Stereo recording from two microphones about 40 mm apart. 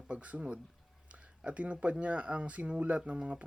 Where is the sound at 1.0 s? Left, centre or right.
Right.